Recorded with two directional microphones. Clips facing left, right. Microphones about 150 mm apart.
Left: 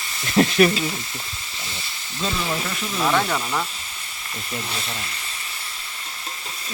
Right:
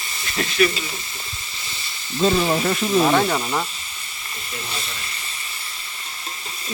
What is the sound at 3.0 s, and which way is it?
Snake, 20° right (ahead or behind).